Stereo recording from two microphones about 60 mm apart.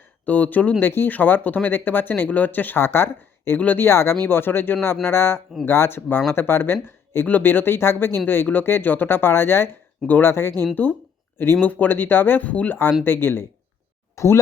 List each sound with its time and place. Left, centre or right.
0.3 s speech: left
2.8 s speech: left
3.6 s speech: left
3.8 s speech: left
7.3 s speech: left
10.8 s speech: right
11.6 s speech: left
14.2 s speech: left